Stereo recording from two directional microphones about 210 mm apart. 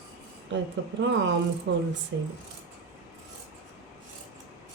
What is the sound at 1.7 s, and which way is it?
Speech, 65° right (ahead or behind).